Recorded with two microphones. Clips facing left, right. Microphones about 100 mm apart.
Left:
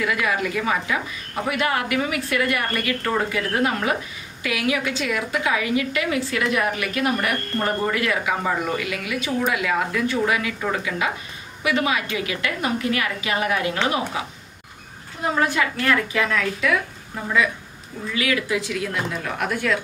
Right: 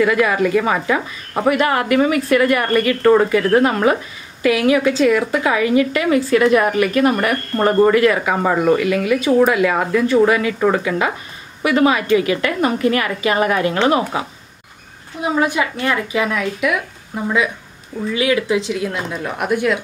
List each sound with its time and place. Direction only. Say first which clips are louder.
0.0 s a woman's voice: right 8 dB; 40° right (ahead or behind)
15.2 s a woman's voice: right 3 dB; 15° right (ahead or behind)
18.1 s speech: right 6 dB; 25° right (ahead or behind)